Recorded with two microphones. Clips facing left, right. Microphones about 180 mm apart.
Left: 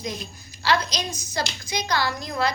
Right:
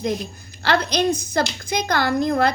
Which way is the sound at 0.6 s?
55° right (ahead or behind).